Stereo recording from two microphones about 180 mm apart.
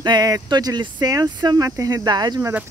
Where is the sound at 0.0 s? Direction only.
20° right (ahead or behind).